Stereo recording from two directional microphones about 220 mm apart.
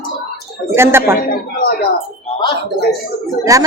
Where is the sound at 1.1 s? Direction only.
45° left (ahead or behind).